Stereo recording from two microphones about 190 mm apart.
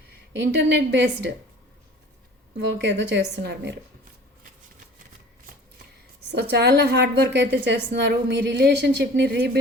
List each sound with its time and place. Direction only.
0.3 s a woman's voice: 65° right (ahead or behind)
2.7 s a woman's voice: 65° right (ahead or behind)
6.3 s a woman's voice: 60° right (ahead or behind)